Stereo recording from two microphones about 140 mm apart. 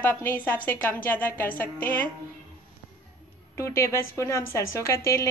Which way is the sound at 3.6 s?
20° left (ahead or behind).